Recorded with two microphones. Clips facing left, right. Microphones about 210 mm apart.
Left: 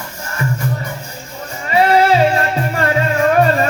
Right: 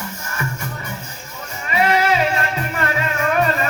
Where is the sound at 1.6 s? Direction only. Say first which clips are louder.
Left 5 dB; 35° left (ahead or behind).